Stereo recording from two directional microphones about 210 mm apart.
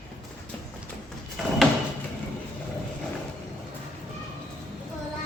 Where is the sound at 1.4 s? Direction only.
Centre (ahead or behind).